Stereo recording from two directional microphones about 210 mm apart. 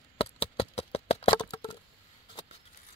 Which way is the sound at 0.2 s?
25° left (ahead or behind).